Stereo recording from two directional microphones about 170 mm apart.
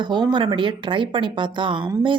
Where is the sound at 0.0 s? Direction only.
25° right (ahead or behind).